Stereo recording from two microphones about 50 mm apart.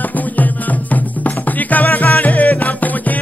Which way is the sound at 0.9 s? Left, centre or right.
Left.